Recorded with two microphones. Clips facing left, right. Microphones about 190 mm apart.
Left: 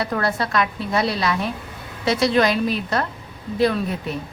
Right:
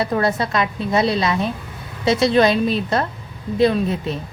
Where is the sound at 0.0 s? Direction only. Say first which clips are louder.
Right 3 dB; 20° right (ahead or behind).